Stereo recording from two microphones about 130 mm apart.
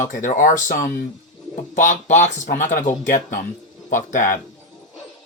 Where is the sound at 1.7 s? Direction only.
75° left (ahead or behind).